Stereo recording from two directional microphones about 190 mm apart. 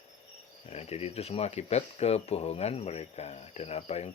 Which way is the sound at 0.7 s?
35° left (ahead or behind).